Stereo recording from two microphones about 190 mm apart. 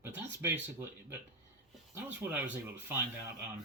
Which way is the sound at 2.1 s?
10° right (ahead or behind).